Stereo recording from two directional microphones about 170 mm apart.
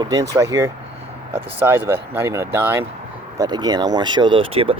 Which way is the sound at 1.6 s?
15° right (ahead or behind).